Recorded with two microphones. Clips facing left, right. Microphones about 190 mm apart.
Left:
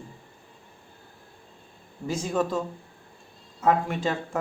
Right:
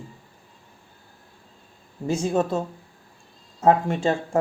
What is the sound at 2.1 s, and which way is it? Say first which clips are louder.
Speech: right 4 dB; 25° right (ahead or behind).